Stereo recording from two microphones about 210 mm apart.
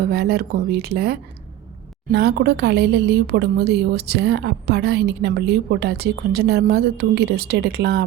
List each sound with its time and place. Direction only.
0.0 s a woman's voice: 50° right (ahead or behind)